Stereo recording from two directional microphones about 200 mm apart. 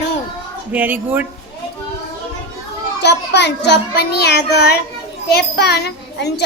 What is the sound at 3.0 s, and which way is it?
A child's voice, 60° left (ahead or behind).